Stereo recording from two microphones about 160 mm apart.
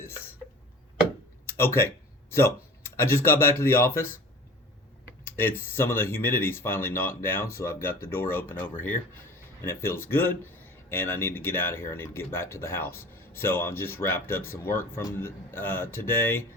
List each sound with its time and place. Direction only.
0.0 s a sound: 15° left (ahead or behind)
1.5 s speech: 15° left (ahead or behind)
5.4 s speech: 15° left (ahead or behind)